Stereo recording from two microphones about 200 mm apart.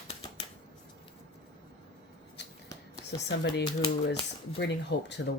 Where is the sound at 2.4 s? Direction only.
60° left (ahead or behind).